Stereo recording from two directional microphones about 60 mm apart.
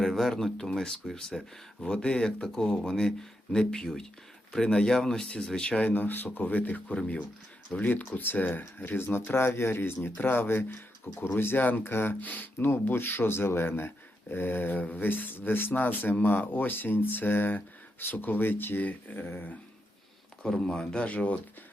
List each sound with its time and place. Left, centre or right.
0.0 s speech: centre; by 12.1 s left
12.2 s speech: left
20.4 s speech: centre